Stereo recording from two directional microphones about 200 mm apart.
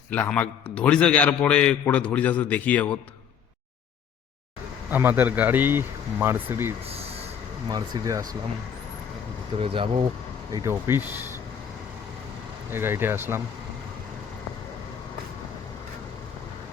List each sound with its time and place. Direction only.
0.1 s a man's voice: 5° left (ahead or behind)
4.9 s speech: 10° right (ahead or behind)
6.8 s a sound: 30° right (ahead or behind)
7.7 s speech: 20° right (ahead or behind)
9.6 s speech: 25° right (ahead or behind)
10.5 s speech: 15° right (ahead or behind)
12.7 s speech: 10° right (ahead or behind)